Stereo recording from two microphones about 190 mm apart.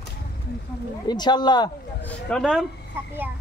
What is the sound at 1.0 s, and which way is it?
Speech, 20° left (ahead or behind).